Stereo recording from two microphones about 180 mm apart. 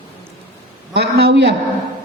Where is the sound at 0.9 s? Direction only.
65° right (ahead or behind).